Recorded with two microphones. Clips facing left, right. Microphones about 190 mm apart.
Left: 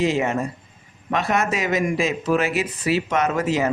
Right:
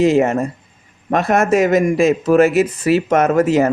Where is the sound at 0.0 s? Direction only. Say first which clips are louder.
Right 7 dB; 45° right (ahead or behind).